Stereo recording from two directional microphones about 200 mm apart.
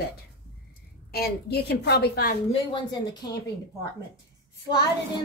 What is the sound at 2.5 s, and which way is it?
Speech, 20° left (ahead or behind).